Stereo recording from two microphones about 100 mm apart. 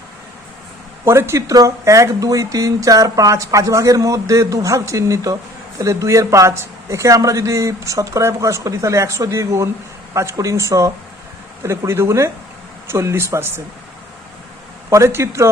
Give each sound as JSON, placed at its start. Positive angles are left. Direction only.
{"t": 1.0, "sound": "speech", "side_deg": -25}
{"t": 14.8, "sound": "speech", "side_deg": -30}